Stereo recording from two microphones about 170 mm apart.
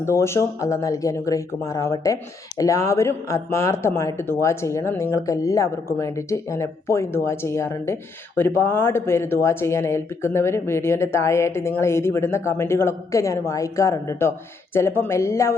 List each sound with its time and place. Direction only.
0.0 s speech: 15° left (ahead or behind)